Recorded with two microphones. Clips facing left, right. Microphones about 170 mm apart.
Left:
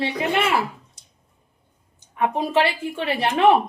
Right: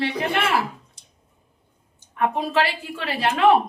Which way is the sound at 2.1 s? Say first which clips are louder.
Left 1 dB; 20° left (ahead or behind).